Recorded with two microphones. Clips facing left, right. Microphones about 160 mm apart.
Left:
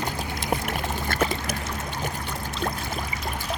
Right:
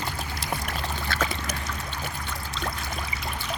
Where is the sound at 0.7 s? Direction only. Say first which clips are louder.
Left 3 dB; 50° left (ahead or behind).